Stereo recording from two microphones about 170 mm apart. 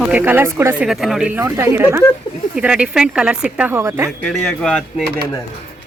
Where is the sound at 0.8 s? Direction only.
Centre (ahead or behind).